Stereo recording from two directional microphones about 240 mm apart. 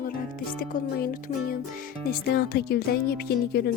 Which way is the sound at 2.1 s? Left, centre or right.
Left.